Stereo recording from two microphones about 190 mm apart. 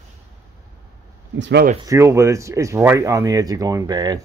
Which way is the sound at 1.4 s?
60° right (ahead or behind).